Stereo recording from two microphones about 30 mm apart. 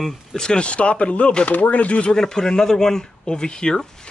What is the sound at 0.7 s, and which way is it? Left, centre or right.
A man's voice, left.